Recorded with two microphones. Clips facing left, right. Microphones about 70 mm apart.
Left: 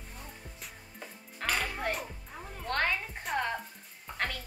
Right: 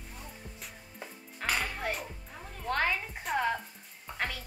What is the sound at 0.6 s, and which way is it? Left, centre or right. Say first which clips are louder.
Music: right 1 dB; centre.